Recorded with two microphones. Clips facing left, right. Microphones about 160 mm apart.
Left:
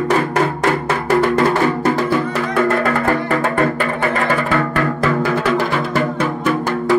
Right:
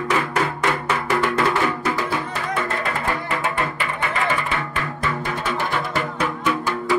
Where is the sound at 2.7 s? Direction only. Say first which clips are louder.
Left 8 dB; 55° left (ahead or behind).